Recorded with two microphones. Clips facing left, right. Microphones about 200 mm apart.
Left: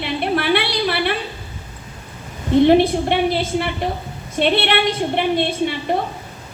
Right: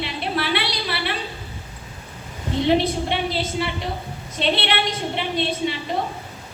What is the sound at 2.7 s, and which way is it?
A woman's voice, 55° left (ahead or behind).